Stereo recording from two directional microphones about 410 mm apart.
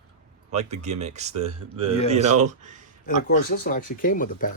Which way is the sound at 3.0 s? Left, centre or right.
Centre.